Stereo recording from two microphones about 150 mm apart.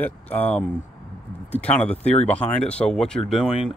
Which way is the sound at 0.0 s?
10° left (ahead or behind).